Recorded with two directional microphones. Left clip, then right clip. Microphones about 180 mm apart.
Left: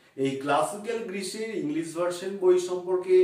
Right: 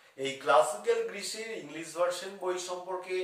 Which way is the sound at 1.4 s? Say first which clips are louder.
Left 9 dB; centre (ahead or behind).